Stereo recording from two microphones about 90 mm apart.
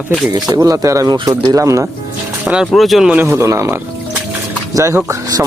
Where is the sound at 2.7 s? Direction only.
Centre (ahead or behind).